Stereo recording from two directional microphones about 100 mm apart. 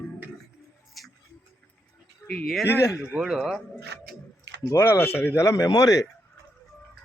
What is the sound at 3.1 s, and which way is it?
Speech, 10° right (ahead or behind).